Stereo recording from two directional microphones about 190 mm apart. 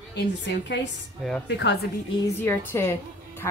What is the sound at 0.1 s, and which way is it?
A woman's voice, 65° left (ahead or behind).